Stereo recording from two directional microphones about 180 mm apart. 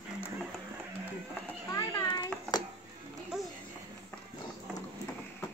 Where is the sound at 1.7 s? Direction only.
20° left (ahead or behind).